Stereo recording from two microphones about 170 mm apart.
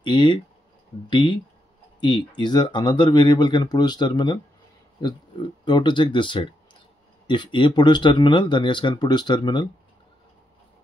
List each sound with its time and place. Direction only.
0.0 s speech: 30° left (ahead or behind)